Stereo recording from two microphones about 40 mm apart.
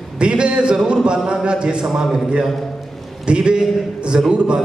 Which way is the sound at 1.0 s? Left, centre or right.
Centre.